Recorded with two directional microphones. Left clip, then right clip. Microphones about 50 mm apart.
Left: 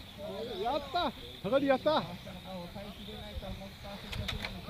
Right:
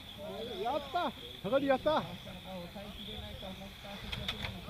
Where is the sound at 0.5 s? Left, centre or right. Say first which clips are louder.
Left 1 dB; left.